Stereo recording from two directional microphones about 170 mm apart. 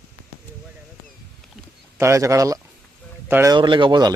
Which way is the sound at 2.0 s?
15° right (ahead or behind).